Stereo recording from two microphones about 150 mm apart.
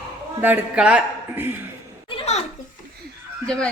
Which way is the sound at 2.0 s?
45° left (ahead or behind).